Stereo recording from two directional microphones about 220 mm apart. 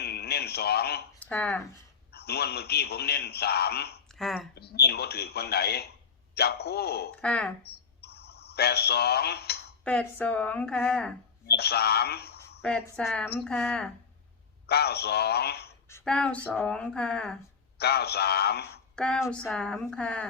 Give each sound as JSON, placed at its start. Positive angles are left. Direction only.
{"t": 0.0, "sound": "radio", "side_deg": 45}
{"t": 1.2, "sound": "speech", "side_deg": 5}
{"t": 2.1, "sound": "a man's voice", "side_deg": 45}
{"t": 4.1, "sound": "speech", "side_deg": 0}
{"t": 4.5, "sound": "a man's voice", "side_deg": 45}
{"t": 7.2, "sound": "speech", "side_deg": 5}
{"t": 7.6, "sound": "a sound", "side_deg": 45}
{"t": 9.8, "sound": "a woman's voice", "side_deg": 5}
{"t": 11.4, "sound": "speech", "side_deg": 45}
{"t": 12.6, "sound": "speech", "side_deg": 5}
{"t": 14.7, "sound": "a man's voice", "side_deg": 45}
{"t": 15.9, "sound": "speech", "side_deg": 10}
{"t": 17.7, "sound": "a man's voice", "side_deg": 45}
{"t": 18.9, "sound": "speech", "side_deg": 5}